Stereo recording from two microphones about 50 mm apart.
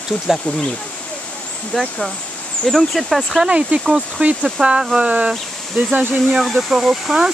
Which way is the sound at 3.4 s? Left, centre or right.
Right.